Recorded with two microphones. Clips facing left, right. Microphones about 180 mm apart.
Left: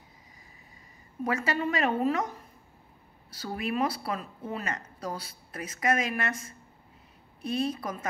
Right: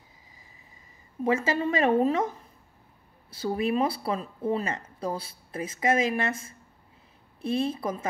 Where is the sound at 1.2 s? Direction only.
25° right (ahead or behind).